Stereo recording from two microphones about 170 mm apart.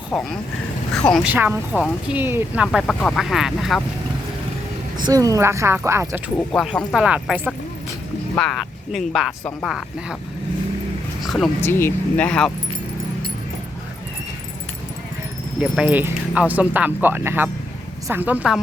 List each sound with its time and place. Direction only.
0.1 s speech: 5° left (ahead or behind)
1.2 s speech: 10° right (ahead or behind)
2.8 s speech: 5° left (ahead or behind)
5.0 s speech: 20° right (ahead or behind)
6.3 s speech: 5° left (ahead or behind)
11.2 s speech: centre (ahead or behind)
11.6 s speech: 15° left (ahead or behind)
15.6 s speech: 5° right (ahead or behind)